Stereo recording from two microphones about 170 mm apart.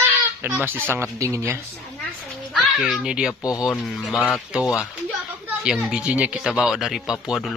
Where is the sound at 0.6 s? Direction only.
10° right (ahead or behind).